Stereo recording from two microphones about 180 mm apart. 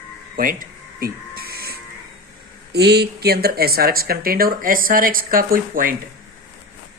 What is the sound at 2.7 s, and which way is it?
Speech, 65° right (ahead or behind).